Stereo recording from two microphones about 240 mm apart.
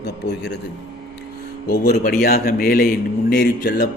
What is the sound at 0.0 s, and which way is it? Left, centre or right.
Speech, left.